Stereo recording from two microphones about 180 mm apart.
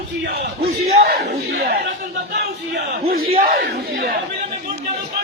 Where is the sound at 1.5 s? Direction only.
55° right (ahead or behind).